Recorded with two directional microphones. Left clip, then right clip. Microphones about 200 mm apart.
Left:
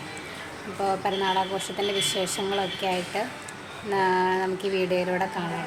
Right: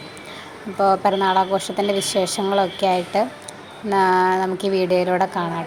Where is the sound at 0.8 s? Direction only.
35° right (ahead or behind).